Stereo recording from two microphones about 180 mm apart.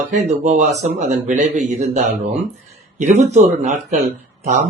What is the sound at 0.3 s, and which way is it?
A man's voice, 40° right (ahead or behind).